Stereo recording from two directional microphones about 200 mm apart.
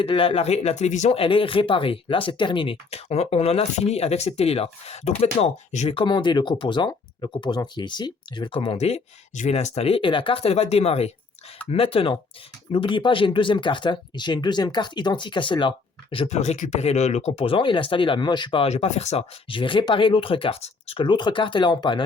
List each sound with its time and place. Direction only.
0.0 s speech: 30° left (ahead or behind)